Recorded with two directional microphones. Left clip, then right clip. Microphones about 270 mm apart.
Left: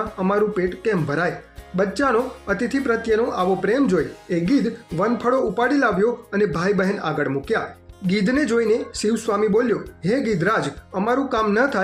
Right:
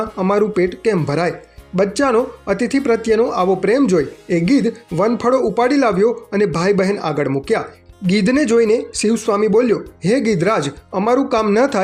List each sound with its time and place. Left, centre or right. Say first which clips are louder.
0.2 s speech: right 5 dB; right